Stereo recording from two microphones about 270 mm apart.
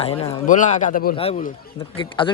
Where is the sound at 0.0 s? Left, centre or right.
Left.